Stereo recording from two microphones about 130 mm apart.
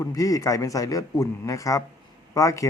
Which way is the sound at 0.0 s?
25° left (ahead or behind).